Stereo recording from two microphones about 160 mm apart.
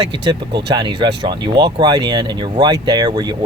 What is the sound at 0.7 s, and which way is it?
Speech, 25° right (ahead or behind).